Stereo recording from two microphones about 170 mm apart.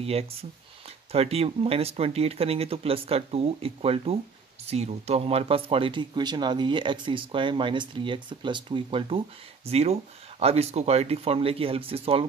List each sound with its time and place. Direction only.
0.0 s speech: 35° right (ahead or behind)